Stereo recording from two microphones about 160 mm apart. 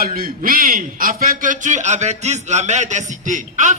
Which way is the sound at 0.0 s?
65° right (ahead or behind).